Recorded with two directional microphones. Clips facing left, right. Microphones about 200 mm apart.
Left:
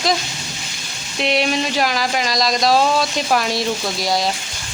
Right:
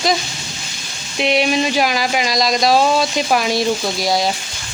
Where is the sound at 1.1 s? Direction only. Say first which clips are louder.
Right 3 dB; 5° right (ahead or behind).